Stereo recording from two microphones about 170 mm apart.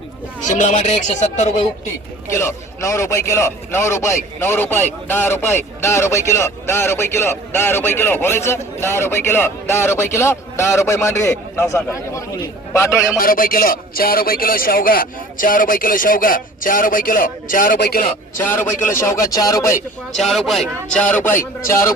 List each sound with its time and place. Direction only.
0.4 s speech: 45° left (ahead or behind)
2.3 s a man's voice: 15° left (ahead or behind)
13.1 s a man's voice: 55° left (ahead or behind)
18.4 s a man's voice: 10° left (ahead or behind)
20.1 s speech: centre (ahead or behind)
21.1 s a man's voice: 10° left (ahead or behind)